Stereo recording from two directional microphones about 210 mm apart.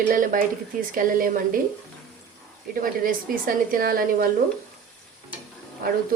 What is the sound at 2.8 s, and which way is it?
A woman's voice, 40° right (ahead or behind).